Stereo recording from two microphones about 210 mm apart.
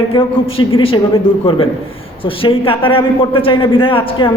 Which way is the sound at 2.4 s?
25° left (ahead or behind).